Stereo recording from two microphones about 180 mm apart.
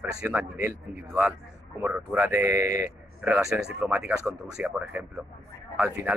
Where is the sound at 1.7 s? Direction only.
10° right (ahead or behind).